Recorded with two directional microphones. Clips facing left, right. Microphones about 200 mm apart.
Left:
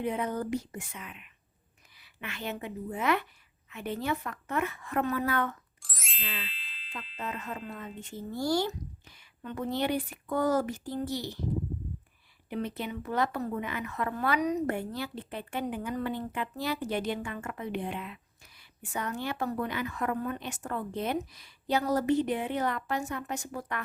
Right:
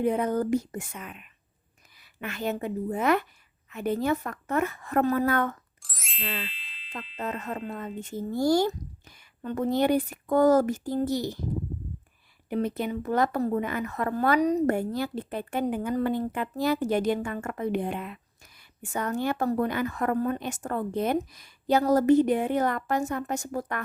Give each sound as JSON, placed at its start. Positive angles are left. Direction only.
{"t": 0.0, "sound": "speech", "side_deg": -45}
{"t": 5.8, "sound": "music", "side_deg": 0}
{"t": 6.5, "sound": "ding", "side_deg": 0}
{"t": 7.2, "sound": "speech", "side_deg": -40}
{"t": 12.5, "sound": "speech", "side_deg": -45}